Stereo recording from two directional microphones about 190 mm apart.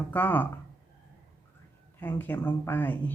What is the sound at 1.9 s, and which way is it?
Speech, 10° left (ahead or behind).